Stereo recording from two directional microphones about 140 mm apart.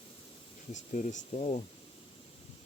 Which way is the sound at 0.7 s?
60° left (ahead or behind).